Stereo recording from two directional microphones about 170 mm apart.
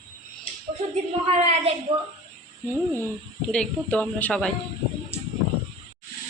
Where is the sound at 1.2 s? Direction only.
35° right (ahead or behind).